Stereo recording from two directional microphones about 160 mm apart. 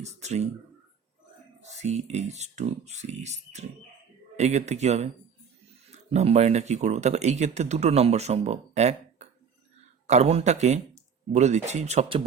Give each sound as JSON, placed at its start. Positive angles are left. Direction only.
{"t": 0.0, "sound": "speech", "side_deg": -45}
{"t": 1.6, "sound": "speech", "side_deg": -45}